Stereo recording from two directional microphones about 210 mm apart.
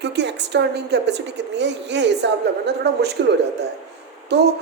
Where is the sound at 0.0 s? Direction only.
55° right (ahead or behind).